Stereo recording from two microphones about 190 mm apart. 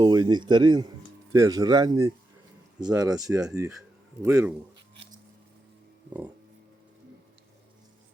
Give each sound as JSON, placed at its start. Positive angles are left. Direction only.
{"t": 0.0, "sound": "speech", "side_deg": -20}